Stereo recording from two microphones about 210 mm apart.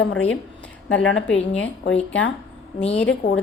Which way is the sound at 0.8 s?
65° left (ahead or behind).